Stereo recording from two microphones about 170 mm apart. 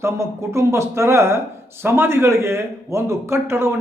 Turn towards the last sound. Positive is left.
turn(degrees=-15)  # may be behind; listen again after turning